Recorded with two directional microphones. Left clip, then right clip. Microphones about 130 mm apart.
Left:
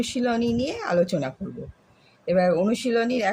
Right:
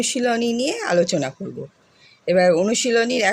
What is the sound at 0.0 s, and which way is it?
Speech, 40° right (ahead or behind).